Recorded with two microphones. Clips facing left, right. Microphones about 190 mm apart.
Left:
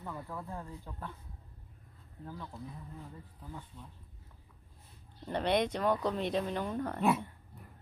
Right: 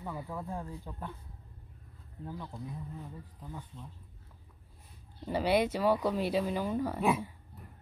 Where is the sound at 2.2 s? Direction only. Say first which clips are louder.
Right 3 dB; 20° right (ahead or behind).